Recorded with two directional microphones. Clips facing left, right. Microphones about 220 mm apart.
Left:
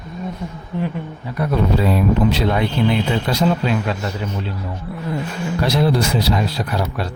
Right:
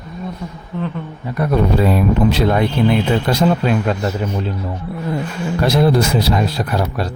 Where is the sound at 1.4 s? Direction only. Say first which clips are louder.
Right 3 dB; 50° right (ahead or behind).